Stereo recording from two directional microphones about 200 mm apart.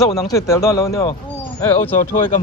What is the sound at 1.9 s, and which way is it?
Speech, 40° left (ahead or behind).